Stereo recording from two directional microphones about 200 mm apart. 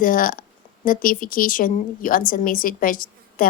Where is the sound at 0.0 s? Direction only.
45° left (ahead or behind).